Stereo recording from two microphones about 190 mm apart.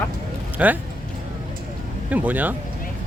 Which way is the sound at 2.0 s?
10° right (ahead or behind).